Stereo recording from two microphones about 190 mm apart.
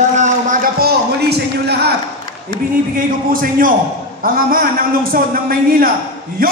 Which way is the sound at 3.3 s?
50° right (ahead or behind).